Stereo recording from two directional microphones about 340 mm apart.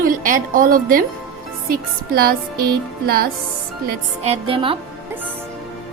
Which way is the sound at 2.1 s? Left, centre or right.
Right.